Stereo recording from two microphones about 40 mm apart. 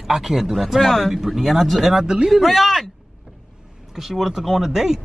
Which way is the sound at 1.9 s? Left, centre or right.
Centre.